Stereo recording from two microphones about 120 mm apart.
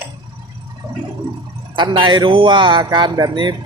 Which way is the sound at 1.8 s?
40° right (ahead or behind).